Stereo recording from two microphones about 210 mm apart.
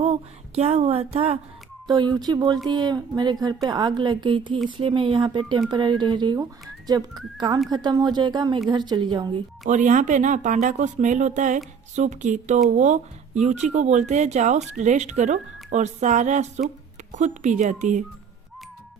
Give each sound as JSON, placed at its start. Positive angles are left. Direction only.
{"t": 0.0, "sound": "a sound", "side_deg": -30}
{"t": 1.9, "sound": "speech", "side_deg": -20}
{"t": 9.6, "sound": "speech", "side_deg": -35}